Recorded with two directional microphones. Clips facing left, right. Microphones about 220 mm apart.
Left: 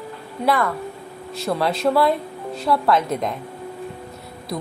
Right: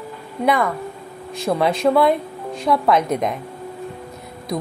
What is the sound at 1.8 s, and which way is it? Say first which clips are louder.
Speech: right 2 dB; centre (ahead or behind).